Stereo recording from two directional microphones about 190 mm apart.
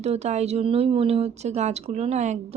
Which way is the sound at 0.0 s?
35° right (ahead or behind).